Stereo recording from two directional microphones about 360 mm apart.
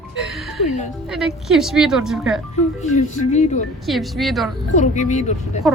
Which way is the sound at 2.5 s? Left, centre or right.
Centre.